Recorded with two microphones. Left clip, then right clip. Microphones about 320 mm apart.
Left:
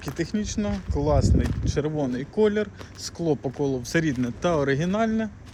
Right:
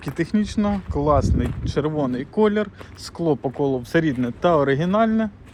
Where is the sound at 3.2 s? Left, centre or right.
Right.